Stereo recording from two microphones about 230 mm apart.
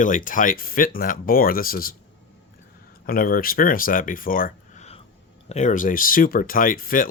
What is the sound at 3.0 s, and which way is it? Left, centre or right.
A man's voice, left.